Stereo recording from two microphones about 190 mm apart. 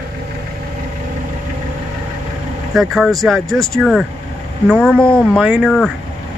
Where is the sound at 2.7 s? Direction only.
Centre (ahead or behind).